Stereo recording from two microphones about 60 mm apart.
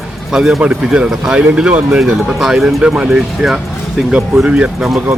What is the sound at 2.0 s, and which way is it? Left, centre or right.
Speech, centre.